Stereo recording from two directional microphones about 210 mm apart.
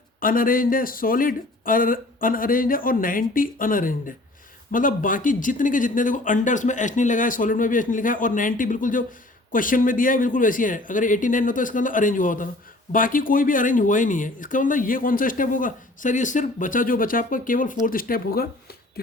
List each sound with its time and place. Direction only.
0.2 s speech: 40° left (ahead or behind)